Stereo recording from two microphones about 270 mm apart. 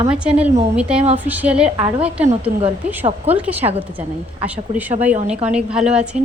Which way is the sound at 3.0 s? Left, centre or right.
Right.